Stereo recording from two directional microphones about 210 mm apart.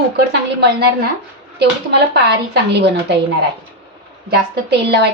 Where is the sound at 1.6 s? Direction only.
55° right (ahead or behind).